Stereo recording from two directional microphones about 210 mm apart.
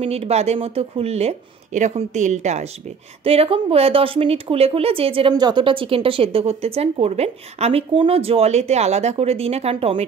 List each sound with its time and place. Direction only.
0.0 s speech: 30° right (ahead or behind)